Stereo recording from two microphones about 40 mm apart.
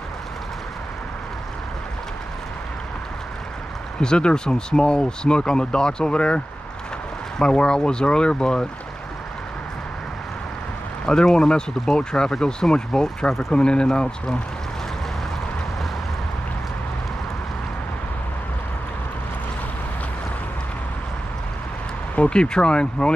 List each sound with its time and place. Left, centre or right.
4.0 s speech: left
11.3 s speech: centre
22.3 s speech: left